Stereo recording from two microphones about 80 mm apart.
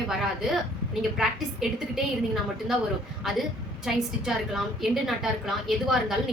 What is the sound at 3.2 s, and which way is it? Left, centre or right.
A woman's voice, centre.